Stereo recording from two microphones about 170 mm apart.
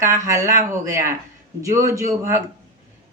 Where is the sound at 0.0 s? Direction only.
15° right (ahead or behind).